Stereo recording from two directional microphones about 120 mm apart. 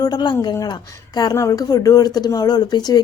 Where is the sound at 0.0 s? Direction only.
35° left (ahead or behind).